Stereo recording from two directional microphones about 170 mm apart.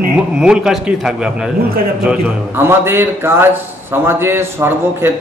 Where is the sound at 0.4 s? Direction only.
5° right (ahead or behind).